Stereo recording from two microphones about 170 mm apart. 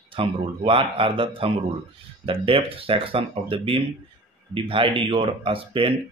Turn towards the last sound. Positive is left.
turn(degrees=-30)  # may be behind; listen again after turning